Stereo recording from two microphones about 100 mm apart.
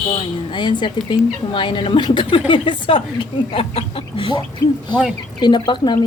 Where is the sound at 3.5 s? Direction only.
65° left (ahead or behind).